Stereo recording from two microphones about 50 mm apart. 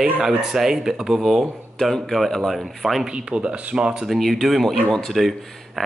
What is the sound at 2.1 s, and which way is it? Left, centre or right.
Speech, centre.